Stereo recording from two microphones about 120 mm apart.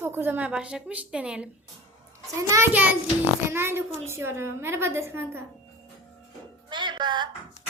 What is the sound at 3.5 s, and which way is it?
A woman's voice, 20° right (ahead or behind).